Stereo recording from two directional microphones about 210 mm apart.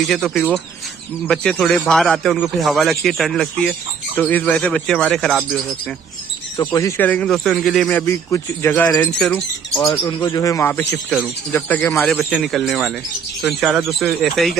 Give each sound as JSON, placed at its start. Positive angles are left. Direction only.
{"t": 0.0, "sound": "speech", "side_deg": 0}
{"t": 6.5, "sound": "a man's voice", "side_deg": 15}
{"t": 9.9, "sound": "a man's voice", "side_deg": 20}